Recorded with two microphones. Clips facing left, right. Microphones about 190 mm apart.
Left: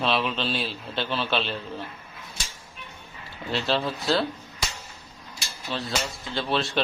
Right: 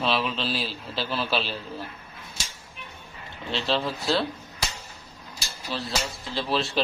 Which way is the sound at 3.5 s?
Centre (ahead or behind).